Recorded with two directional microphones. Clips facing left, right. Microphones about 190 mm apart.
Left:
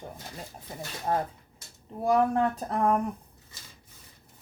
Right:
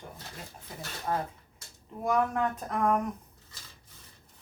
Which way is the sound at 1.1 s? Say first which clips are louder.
Left 3 dB; 30° left (ahead or behind).